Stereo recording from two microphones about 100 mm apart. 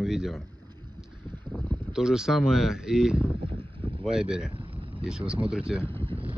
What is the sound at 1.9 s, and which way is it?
Speech, 5° right (ahead or behind).